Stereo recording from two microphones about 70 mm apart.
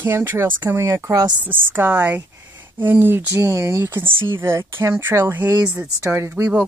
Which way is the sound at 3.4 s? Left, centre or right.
Right.